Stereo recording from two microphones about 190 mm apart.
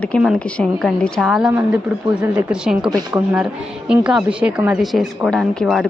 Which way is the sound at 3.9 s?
5° right (ahead or behind).